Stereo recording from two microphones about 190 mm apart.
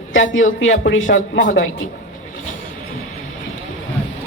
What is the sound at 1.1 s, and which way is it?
Speech, 45° left (ahead or behind).